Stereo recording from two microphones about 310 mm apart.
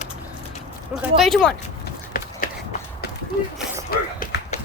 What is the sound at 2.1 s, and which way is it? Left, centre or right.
Run, left.